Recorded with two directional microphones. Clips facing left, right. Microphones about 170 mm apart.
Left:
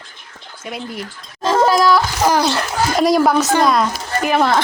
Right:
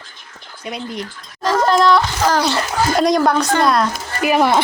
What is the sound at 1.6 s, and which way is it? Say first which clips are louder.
A woman's voice: right 3 dB; 5° left (ahead or behind).